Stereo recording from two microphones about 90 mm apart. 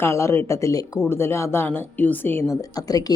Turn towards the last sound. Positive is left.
turn(degrees=45)  # may be behind; listen again after turning